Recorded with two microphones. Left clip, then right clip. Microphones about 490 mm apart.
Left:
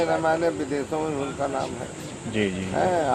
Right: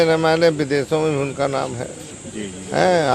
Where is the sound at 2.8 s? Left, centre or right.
Right.